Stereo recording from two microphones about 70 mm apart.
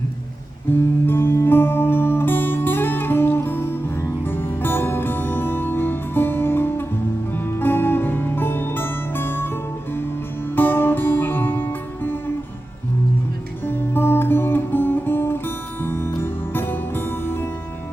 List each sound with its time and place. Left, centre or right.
0.7 s music: left
10.5 s music: left
13.7 s music: left